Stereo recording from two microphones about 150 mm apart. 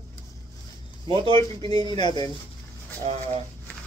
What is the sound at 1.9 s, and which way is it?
Speech, 30° left (ahead or behind).